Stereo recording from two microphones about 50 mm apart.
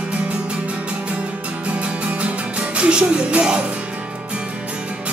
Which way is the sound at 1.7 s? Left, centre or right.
Right.